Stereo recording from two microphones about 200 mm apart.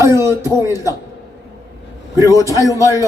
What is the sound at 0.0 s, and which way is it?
Speech, 15° right (ahead or behind).